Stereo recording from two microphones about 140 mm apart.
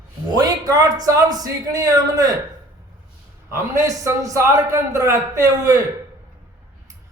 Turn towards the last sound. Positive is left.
turn(degrees=-20)  # may be behind; listen again after turning